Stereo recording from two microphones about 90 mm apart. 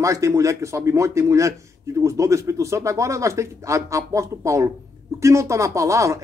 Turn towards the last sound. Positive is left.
turn(degrees=-35)  # may be behind; listen again after turning